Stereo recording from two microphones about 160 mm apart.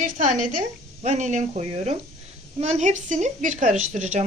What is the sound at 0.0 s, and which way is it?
Speech, 50° right (ahead or behind).